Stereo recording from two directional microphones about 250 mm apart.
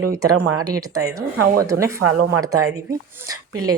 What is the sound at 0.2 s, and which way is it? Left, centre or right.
Speech, right.